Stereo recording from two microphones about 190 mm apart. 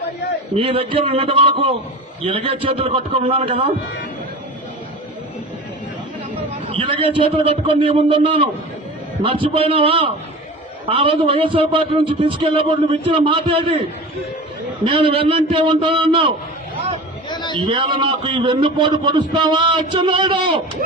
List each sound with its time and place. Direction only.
0.5 s a man's voice: 30° right (ahead or behind)
6.7 s a man's voice: 30° right (ahead or behind)
14.8 s a man's voice: 25° right (ahead or behind)
17.2 s a sound: 25° left (ahead or behind)
17.5 s a man's voice: 25° right (ahead or behind)